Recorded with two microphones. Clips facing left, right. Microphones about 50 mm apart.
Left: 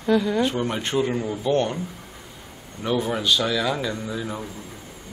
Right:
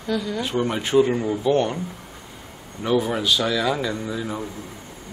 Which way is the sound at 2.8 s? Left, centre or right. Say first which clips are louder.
Right 2 dB; centre.